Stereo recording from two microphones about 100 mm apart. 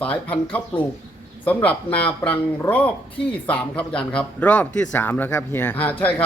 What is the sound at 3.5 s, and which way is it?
A man's voice, 10° left (ahead or behind).